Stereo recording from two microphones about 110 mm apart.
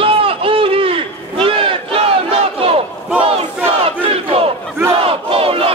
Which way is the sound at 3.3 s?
60° right (ahead or behind).